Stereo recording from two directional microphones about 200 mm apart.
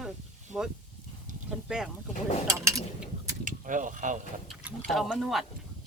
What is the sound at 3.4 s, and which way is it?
Speech, 40° right (ahead or behind).